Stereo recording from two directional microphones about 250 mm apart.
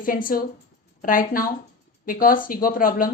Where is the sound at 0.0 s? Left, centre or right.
Left.